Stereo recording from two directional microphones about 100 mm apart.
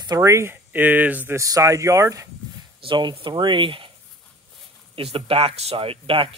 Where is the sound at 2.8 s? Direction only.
55° right (ahead or behind).